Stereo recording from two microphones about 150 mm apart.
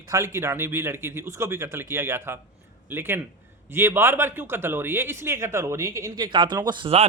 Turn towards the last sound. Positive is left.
turn(degrees=-35)  # may be behind; listen again after turning